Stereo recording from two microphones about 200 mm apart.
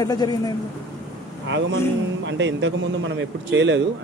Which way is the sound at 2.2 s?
65° right (ahead or behind).